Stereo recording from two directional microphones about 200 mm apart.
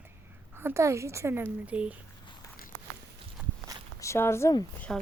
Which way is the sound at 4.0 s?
15° left (ahead or behind).